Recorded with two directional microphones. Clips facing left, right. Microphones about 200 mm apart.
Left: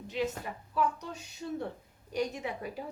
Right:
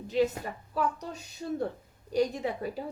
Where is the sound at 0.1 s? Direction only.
35° right (ahead or behind).